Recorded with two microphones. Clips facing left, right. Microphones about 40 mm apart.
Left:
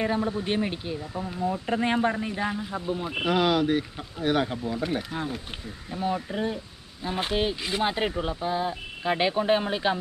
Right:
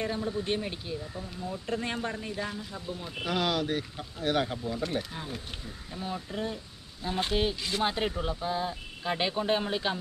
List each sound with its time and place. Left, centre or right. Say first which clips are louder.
0.0 s speech: left 5 dB; left
1.1 s speech: left 8 dB; left
3.3 s speech: left 6 dB; centre
6.4 s speech: left 5 dB; centre